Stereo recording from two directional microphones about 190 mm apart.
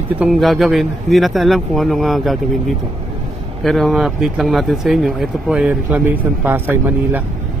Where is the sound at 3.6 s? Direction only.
Centre (ahead or behind).